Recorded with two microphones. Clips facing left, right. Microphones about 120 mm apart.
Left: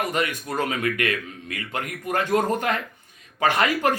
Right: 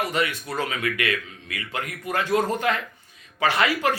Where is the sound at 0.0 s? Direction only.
45° left (ahead or behind).